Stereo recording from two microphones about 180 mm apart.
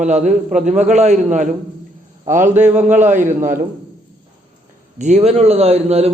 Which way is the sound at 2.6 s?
40° right (ahead or behind).